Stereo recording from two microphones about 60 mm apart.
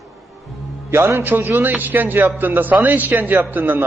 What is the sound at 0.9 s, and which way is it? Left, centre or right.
A man's voice, right.